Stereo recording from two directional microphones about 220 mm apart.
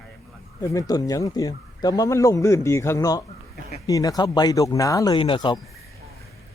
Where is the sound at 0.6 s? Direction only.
15° left (ahead or behind).